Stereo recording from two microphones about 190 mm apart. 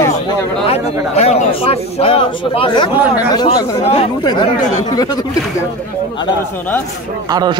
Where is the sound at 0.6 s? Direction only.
35° left (ahead or behind).